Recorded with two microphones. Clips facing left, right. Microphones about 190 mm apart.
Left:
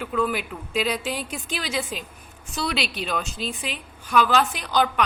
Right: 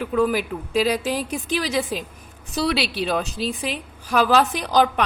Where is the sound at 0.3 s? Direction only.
35° right (ahead or behind).